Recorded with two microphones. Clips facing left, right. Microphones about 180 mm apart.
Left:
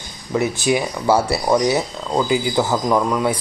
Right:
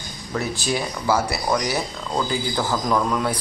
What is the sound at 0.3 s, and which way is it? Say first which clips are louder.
Speech: left 6 dB; 15° left (ahead or behind).